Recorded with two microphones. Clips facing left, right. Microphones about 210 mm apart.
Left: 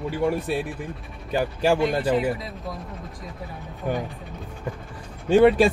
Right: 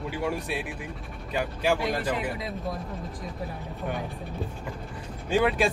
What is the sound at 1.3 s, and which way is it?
Speech, 30° left (ahead or behind).